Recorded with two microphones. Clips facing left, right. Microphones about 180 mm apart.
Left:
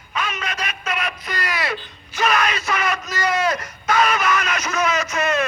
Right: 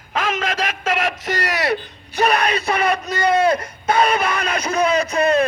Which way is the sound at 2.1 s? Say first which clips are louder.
Right 3 dB; 35° right (ahead or behind).